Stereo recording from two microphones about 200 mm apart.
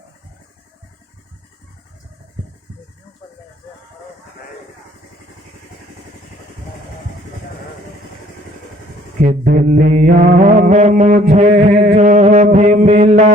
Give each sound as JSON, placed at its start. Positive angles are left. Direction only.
{"t": 9.2, "sound": "mantra", "side_deg": -45}
{"t": 11.9, "sound": "music", "side_deg": -35}